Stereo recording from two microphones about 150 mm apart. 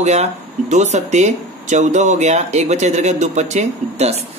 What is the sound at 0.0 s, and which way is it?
Speech, 50° right (ahead or behind).